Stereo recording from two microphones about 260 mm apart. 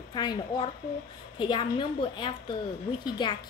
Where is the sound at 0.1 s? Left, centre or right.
Centre.